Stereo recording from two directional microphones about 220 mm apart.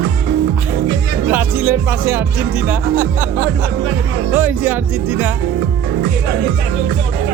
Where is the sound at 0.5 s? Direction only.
10° right (ahead or behind).